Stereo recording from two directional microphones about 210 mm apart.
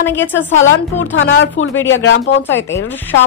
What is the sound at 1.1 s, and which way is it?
Speech, 65° left (ahead or behind).